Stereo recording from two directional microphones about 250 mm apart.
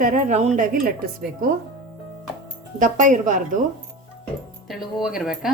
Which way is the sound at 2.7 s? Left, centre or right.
Right.